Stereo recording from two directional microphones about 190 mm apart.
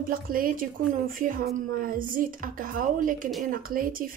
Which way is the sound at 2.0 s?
45° right (ahead or behind).